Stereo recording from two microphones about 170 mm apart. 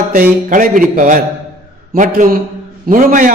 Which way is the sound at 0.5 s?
50° right (ahead or behind).